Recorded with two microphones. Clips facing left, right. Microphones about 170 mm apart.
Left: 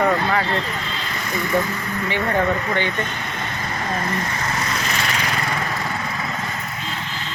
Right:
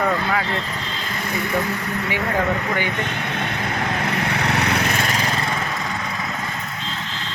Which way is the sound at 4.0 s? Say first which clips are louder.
Right 2 dB; 75° right (ahead or behind).